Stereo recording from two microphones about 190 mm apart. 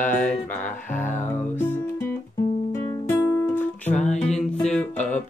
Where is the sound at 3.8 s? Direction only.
35° left (ahead or behind).